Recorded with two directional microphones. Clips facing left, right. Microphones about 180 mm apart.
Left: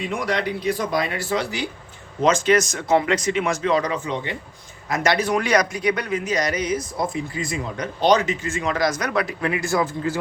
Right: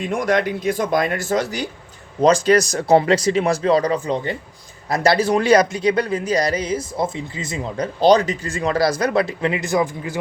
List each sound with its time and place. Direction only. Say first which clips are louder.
0.0 s a man's voice: right 5 dB; 50° right (ahead or behind); by 10.2 s 15° right (ahead or behind)